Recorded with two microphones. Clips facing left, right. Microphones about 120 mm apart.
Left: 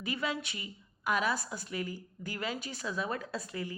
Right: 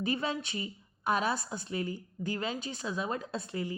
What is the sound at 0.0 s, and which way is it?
A woman's voice, 30° right (ahead or behind).